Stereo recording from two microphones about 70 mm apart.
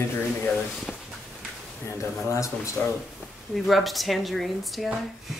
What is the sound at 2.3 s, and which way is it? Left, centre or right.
Speech, left.